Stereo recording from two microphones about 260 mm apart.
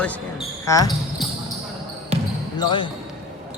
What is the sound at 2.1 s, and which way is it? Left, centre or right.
Basketball bounce, right.